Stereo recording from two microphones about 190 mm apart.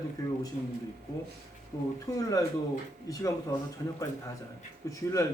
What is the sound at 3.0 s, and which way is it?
Speech, 15° left (ahead or behind).